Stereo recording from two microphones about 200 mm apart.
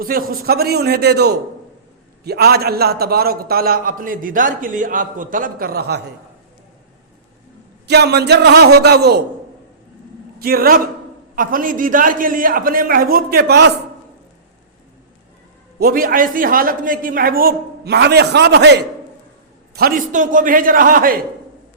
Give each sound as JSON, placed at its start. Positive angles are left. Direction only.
{"t": 0.0, "sound": "a man's voice", "side_deg": -45}
{"t": 7.9, "sound": "a man's voice", "side_deg": -55}
{"t": 10.4, "sound": "a man's voice", "side_deg": -45}
{"t": 15.8, "sound": "a man's voice", "side_deg": -45}